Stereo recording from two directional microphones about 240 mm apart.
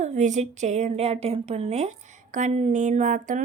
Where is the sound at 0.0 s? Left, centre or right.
Right.